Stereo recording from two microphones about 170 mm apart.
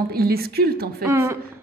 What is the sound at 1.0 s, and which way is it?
Speech, 15° right (ahead or behind).